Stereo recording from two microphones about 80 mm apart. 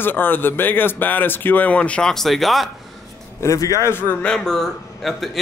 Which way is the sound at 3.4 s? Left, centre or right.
Left.